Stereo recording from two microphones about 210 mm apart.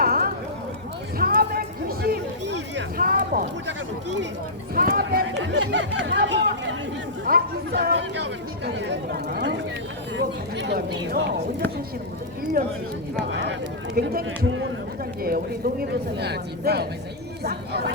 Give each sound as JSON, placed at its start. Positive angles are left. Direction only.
{"t": 0.0, "sound": "a sound", "side_deg": -45}
{"t": 4.7, "sound": "speech", "side_deg": -45}
{"t": 5.4, "sound": "speech", "side_deg": -65}
{"t": 7.3, "sound": "speech", "side_deg": -45}
{"t": 12.6, "sound": "speech", "side_deg": -45}
{"t": 13.9, "sound": "speech", "side_deg": -45}
{"t": 14.3, "sound": "a man's voice", "side_deg": -65}
{"t": 15.2, "sound": "speech", "side_deg": -45}